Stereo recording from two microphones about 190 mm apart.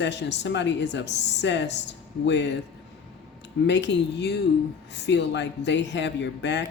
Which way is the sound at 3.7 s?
65° left (ahead or behind).